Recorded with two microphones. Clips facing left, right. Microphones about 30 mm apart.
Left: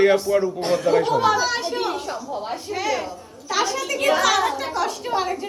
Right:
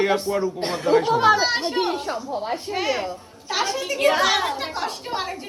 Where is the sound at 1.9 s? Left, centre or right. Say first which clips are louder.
Right 1 dB; right.